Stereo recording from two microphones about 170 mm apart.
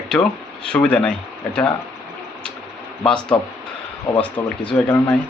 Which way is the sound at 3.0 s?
5° left (ahead or behind).